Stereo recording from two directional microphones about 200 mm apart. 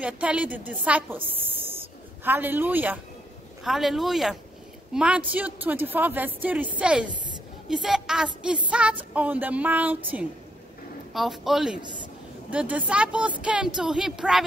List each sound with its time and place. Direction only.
0.0 s a woman's voice: 5° right (ahead or behind)
1.2 s a sound: 10° right (ahead or behind)
2.2 s a woman's voice: 10° right (ahead or behind)
11.1 s speech: centre (ahead or behind)
11.8 s a woman's voice: 25° right (ahead or behind)
12.4 s speech: 5° right (ahead or behind)